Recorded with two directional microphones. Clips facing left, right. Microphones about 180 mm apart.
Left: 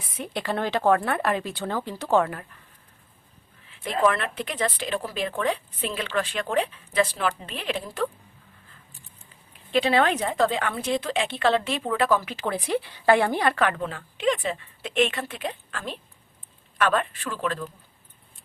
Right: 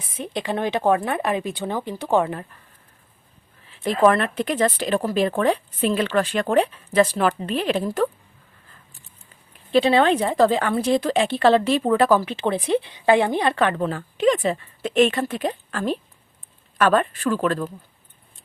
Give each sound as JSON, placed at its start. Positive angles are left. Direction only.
{"t": 0.1, "sound": "a woman's voice", "side_deg": -20}
{"t": 3.7, "sound": "speech", "side_deg": -40}
{"t": 9.7, "sound": "a woman's voice", "side_deg": -30}